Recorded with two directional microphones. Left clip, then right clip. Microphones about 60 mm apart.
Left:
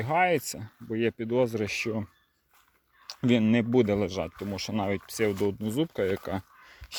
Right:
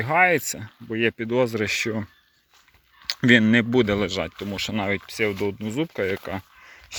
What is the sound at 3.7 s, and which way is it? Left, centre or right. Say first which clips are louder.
Speech: right 4 dB; centre.